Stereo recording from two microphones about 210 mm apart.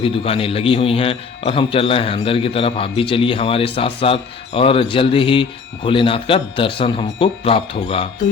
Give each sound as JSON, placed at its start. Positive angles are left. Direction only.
{"t": 0.0, "sound": "a man's voice", "side_deg": 25}